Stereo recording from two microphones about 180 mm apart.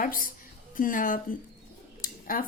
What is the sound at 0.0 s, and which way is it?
Speech, 50° left (ahead or behind).